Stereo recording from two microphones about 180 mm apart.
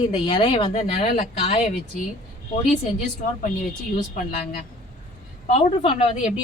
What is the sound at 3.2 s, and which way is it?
Speech, 40° left (ahead or behind).